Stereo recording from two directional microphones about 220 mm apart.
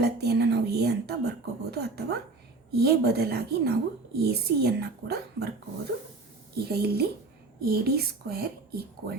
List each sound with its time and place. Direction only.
0.0 s a woman's voice: 50° right (ahead or behind)
6.7 s a woman's voice: 45° right (ahead or behind)